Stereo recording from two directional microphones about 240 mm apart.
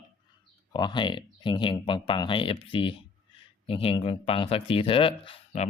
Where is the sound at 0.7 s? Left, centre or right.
Centre.